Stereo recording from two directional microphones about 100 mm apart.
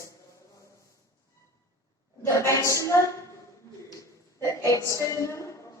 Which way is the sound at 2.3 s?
30° left (ahead or behind).